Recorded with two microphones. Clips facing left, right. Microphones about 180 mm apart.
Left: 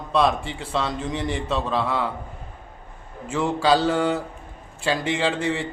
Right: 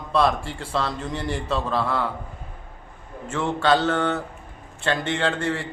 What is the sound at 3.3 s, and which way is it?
Mantra, 5° left (ahead or behind).